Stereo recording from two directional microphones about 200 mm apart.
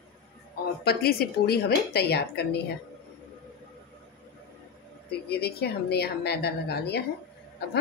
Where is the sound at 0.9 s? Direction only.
50° left (ahead or behind).